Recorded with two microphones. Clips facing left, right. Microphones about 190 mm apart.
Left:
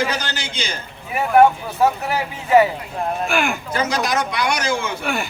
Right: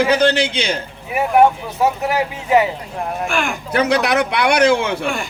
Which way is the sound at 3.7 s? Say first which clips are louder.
Right 7 dB; 65° right (ahead or behind).